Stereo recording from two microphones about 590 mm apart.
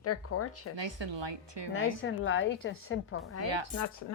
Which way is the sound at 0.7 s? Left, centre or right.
Right.